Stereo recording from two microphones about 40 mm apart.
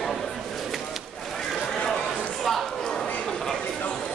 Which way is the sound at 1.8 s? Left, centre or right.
Left.